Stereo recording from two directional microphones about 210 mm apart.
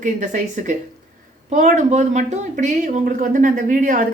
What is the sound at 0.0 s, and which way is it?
Speech, 35° right (ahead or behind).